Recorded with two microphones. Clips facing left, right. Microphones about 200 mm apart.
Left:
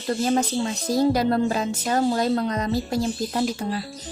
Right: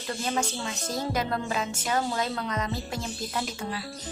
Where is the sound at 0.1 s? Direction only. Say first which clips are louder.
Left 8 dB; 40° left (ahead or behind).